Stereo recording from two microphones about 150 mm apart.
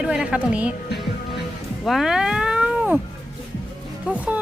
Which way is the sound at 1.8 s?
Centre (ahead or behind).